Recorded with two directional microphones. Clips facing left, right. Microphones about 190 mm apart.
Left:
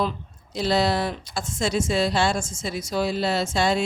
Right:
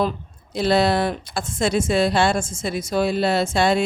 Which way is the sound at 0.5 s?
55° right (ahead or behind).